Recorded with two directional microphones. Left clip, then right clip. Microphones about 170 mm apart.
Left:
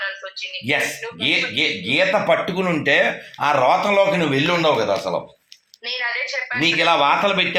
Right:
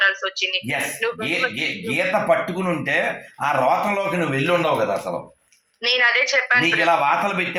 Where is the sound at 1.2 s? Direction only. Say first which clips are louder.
Left 8 dB; 40° left (ahead or behind).